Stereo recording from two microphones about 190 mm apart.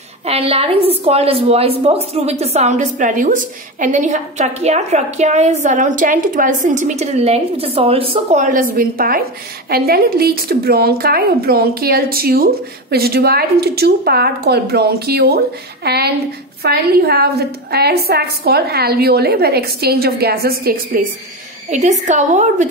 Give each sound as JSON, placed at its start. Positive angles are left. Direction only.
{"t": 0.2, "sound": "a woman's voice", "side_deg": -30}
{"t": 21.6, "sound": "a woman's voice", "side_deg": -40}